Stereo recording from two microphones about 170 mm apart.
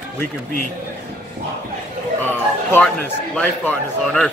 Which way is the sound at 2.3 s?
10° left (ahead or behind).